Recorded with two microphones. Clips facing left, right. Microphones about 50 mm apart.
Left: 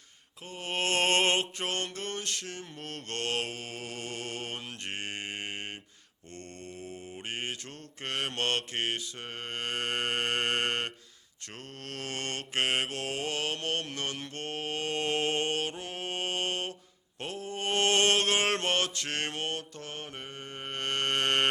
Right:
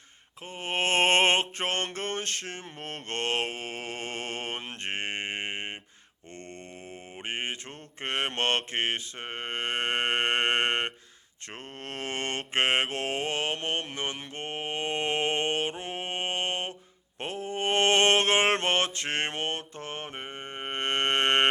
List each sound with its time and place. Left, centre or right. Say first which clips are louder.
0.4 s mantra: right 3 dB; right